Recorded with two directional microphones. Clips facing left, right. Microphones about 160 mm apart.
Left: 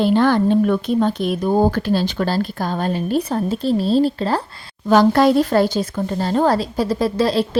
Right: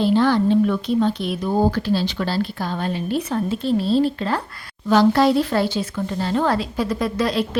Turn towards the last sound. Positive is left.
turn(degrees=30)  # may be behind; listen again after turning